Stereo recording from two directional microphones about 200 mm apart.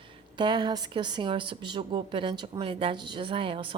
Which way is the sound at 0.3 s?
20° right (ahead or behind).